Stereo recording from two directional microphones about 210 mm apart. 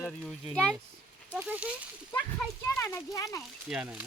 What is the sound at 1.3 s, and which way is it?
Speech, 5° right (ahead or behind).